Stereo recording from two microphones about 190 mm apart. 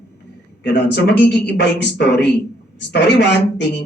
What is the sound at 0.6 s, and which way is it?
A man's voice, 65° left (ahead or behind).